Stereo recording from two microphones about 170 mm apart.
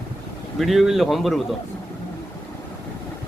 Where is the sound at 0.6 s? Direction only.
Centre (ahead or behind).